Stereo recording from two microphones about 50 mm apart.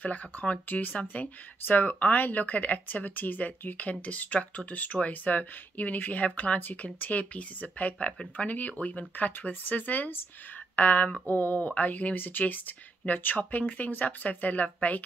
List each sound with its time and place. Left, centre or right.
0.0 s speech: left